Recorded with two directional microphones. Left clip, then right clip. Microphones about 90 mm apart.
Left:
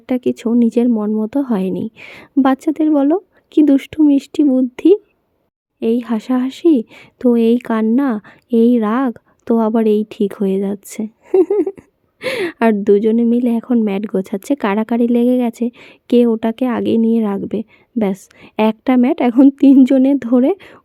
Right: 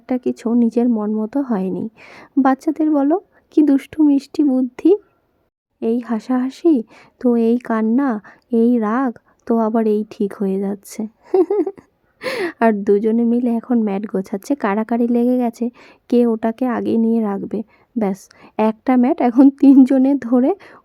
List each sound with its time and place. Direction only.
0.0 s speech: 15° left (ahead or behind)